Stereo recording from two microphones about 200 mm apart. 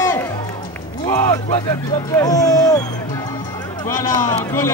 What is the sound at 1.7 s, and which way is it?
Speech, 15° left (ahead or behind).